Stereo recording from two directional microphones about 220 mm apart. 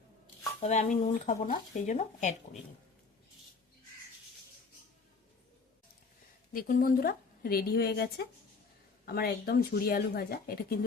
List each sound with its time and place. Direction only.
0.6 s speech: 30° left (ahead or behind)
6.5 s a woman's voice: 40° left (ahead or behind)